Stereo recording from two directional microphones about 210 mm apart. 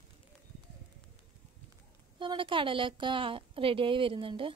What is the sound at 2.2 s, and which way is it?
A woman's voice, 25° right (ahead or behind).